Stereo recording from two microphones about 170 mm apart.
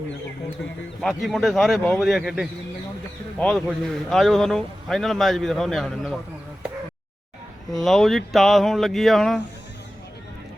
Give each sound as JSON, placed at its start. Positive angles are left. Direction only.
{"t": 1.0, "sound": "speech", "side_deg": 0}
{"t": 7.7, "sound": "speech", "side_deg": 0}